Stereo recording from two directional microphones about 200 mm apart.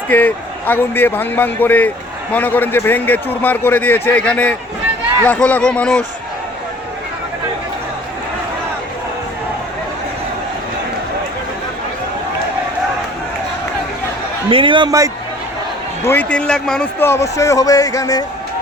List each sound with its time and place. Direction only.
0.1 s speech: 10° left (ahead or behind)
14.5 s a man's voice: 25° right (ahead or behind)
16.0 s speech: 5° left (ahead or behind)